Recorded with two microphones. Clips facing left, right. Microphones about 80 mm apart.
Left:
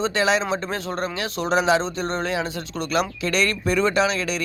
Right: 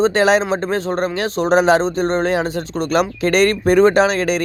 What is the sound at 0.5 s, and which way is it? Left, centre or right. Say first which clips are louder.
A man's voice: right 7 dB; right.